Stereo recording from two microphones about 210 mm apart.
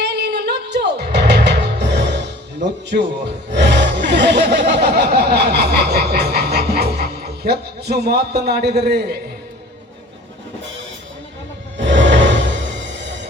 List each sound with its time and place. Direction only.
0.0 s music: 50° right (ahead or behind)
2.9 s speech: 55° right (ahead or behind)
11.8 s a sound: 60° right (ahead or behind)
12.9 s music: 60° right (ahead or behind)